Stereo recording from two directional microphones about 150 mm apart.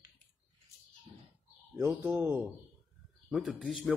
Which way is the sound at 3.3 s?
Centre (ahead or behind).